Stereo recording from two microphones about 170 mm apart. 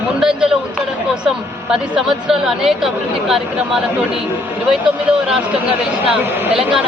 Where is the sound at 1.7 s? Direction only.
5° right (ahead or behind).